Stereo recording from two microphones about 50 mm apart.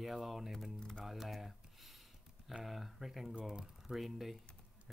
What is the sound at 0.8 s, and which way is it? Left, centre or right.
Speech, centre.